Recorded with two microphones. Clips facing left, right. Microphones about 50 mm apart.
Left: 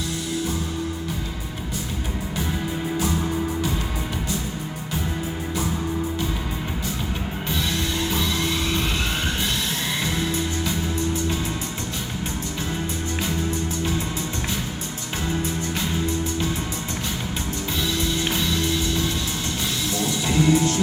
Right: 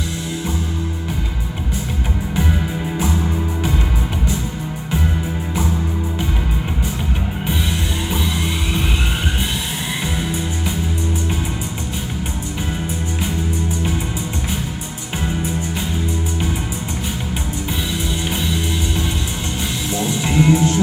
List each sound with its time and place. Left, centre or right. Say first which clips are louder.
8.1 s music: right 2 dB; centre
10.0 s music: right 1 dB; centre
19.9 s music: right 5 dB; right